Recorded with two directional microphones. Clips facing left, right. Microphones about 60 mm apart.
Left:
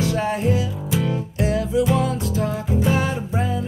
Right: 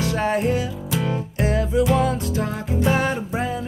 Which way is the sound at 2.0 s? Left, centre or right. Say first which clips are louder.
Even; centre.